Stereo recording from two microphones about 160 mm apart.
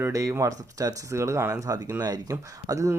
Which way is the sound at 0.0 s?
20° right (ahead or behind).